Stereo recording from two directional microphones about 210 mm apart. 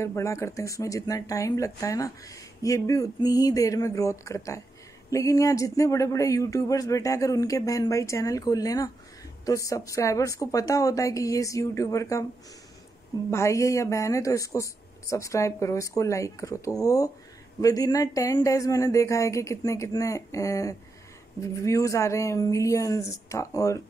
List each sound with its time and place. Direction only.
0.0 s speech: 15° left (ahead or behind)
13.3 s speech: 15° left (ahead or behind)